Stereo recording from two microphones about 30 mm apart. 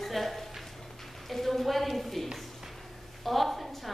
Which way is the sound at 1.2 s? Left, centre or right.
Centre.